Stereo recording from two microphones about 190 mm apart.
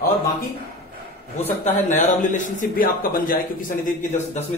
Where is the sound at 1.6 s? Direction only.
40° left (ahead or behind).